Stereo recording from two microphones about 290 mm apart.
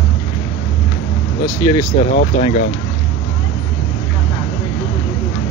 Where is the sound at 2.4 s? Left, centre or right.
Left.